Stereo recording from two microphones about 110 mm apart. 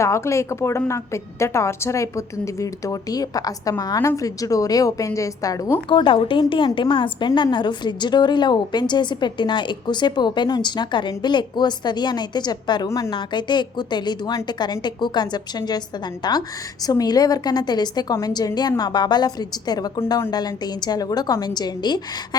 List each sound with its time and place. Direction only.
0.0 s a woman's voice: 25° left (ahead or behind)
5.9 s a woman's voice: 50° left (ahead or behind)